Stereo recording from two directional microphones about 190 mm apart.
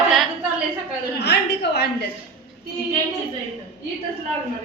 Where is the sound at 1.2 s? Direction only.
60° left (ahead or behind).